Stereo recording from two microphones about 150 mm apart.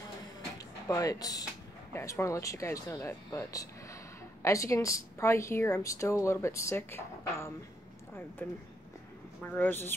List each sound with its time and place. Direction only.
0.8 s a woman's voice: 25° left (ahead or behind)